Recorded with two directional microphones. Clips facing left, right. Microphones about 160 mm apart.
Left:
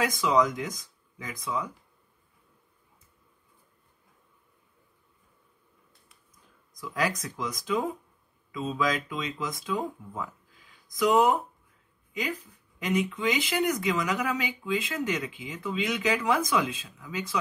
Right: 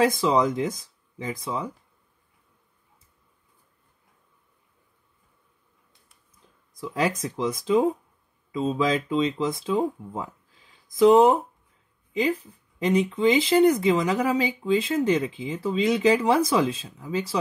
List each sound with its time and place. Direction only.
0.0 s speech: 30° right (ahead or behind)
6.8 s speech: 25° right (ahead or behind)